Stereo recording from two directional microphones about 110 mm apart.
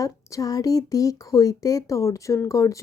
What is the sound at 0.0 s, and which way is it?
Speech, 30° left (ahead or behind).